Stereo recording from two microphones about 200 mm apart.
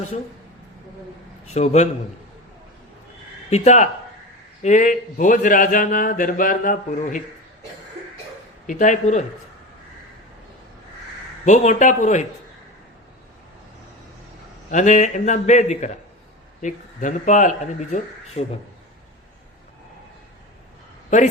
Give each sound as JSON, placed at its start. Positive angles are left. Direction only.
{"t": 1.5, "sound": "a man's voice", "side_deg": 35}
{"t": 3.5, "sound": "a man's voice", "side_deg": 35}
{"t": 8.6, "sound": "a man's voice", "side_deg": 40}
{"t": 11.4, "sound": "a man's voice", "side_deg": 35}
{"t": 14.7, "sound": "a man's voice", "side_deg": 40}
{"t": 21.1, "sound": "a man's voice", "side_deg": 40}